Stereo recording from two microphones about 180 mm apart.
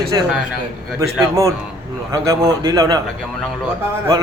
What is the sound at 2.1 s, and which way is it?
Speech, 15° right (ahead or behind).